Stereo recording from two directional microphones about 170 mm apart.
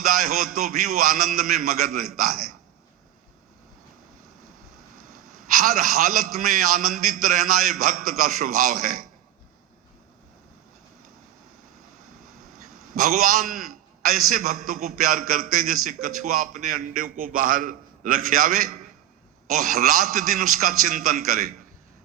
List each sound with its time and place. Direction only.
0.0 s a man's voice: 55° right (ahead or behind)
5.5 s a man's voice: 50° right (ahead or behind)
13.0 s a man's voice: 55° right (ahead or behind)